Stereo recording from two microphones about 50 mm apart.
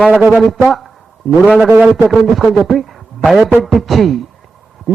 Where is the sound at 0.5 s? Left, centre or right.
Centre.